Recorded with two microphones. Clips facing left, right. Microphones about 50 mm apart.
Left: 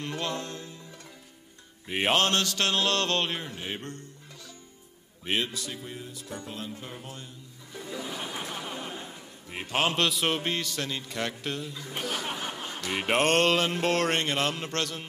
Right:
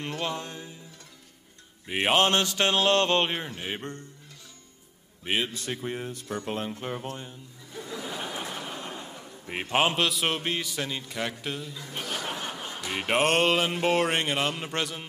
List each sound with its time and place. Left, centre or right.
0.2 s music: centre
1.9 s music: centre
2.1 s mantra: right
3.4 s music: centre
5.2 s a man's voice: centre
5.5 s speech: right
8.1 s a sound: centre
9.5 s mantra: right
9.9 s music: centre